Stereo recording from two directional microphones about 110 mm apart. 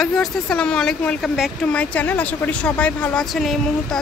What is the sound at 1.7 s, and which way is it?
Speech, 10° left (ahead or behind).